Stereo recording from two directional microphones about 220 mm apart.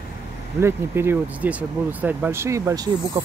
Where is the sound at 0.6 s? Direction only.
10° right (ahead or behind).